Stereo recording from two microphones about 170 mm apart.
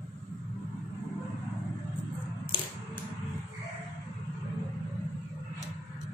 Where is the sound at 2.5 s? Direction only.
30° left (ahead or behind).